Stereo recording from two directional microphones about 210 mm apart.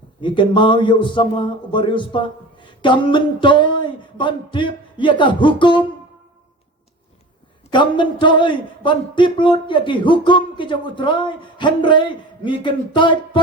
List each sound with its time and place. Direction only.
0.2 s speech: 20° left (ahead or behind)
7.7 s speech: 20° left (ahead or behind)